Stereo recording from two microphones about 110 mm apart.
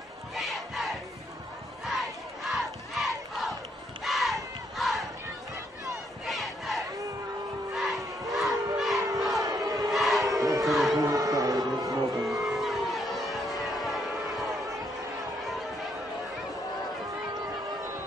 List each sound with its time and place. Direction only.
0.4 s crowd: centre (ahead or behind)
6.2 s battle cry: centre (ahead or behind)
8.7 s crowd: centre (ahead or behind)
9.0 s battle cry: 30° right (ahead or behind)
9.4 s crowd: 30° right (ahead or behind)
9.8 s crowd: centre (ahead or behind)
10.2 s battle cry: 30° right (ahead or behind)
10.6 s music: centre (ahead or behind)
11.0 s a sound: 35° right (ahead or behind)
12.3 s a sound: centre (ahead or behind)